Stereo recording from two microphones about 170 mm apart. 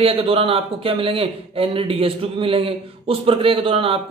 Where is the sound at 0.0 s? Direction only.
35° right (ahead or behind).